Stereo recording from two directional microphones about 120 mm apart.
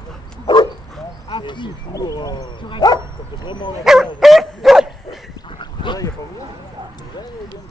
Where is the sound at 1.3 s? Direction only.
40° left (ahead or behind).